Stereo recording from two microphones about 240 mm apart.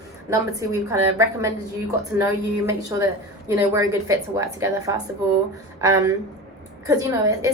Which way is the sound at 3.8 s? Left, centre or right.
Centre.